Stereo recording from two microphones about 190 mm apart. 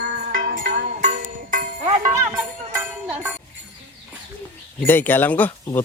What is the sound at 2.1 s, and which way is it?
Music, 15° right (ahead or behind).